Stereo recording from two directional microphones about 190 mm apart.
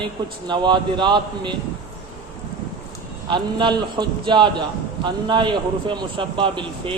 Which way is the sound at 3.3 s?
25° right (ahead or behind).